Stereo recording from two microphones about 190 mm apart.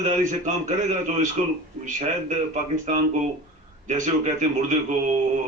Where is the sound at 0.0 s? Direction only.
40° right (ahead or behind).